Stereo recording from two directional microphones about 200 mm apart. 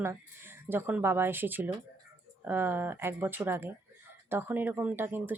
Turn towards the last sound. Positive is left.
turn(degrees=-10)  # may be behind; listen again after turning